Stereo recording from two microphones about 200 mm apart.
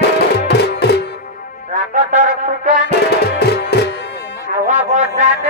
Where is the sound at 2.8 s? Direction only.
55° left (ahead or behind).